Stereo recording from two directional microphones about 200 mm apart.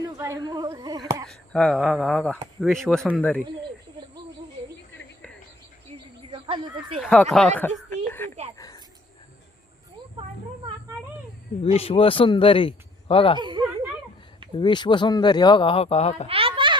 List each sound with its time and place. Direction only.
0.2 s speech: 15° right (ahead or behind)
1.3 s speech: 5° left (ahead or behind)
6.3 s speech: 25° right (ahead or behind)
7.0 s speech: 5° left (ahead or behind)
7.9 s a sound: 10° left (ahead or behind)
11.6 s speech: 30° left (ahead or behind)
13.4 s a sound: 25° right (ahead or behind)
14.5 s speech: 25° left (ahead or behind)
16.2 s a sound: 30° right (ahead or behind)